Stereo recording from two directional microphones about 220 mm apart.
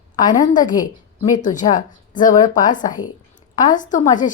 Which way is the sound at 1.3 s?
35° left (ahead or behind).